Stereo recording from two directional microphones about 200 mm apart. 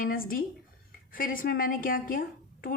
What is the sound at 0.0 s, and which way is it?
A woman's voice, 45° left (ahead or behind).